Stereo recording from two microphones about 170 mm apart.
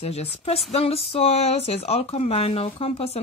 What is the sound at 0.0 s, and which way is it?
Speech, 35° left (ahead or behind).